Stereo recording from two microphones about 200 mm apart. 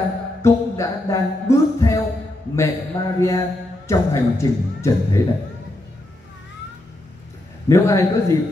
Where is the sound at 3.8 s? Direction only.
15° left (ahead or behind).